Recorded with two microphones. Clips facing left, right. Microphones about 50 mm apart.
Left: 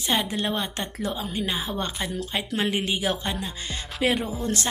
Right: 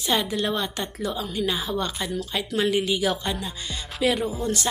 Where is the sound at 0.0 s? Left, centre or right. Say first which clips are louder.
Right 1 dB; left.